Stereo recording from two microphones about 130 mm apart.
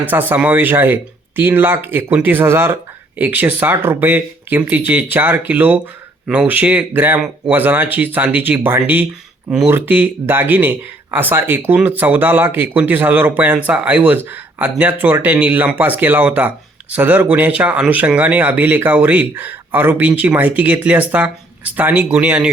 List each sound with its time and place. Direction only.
0.0 s speech: 15° right (ahead or behind)